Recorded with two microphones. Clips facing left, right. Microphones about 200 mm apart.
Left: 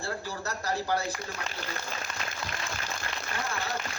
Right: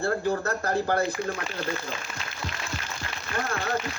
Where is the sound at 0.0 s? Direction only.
55° right (ahead or behind).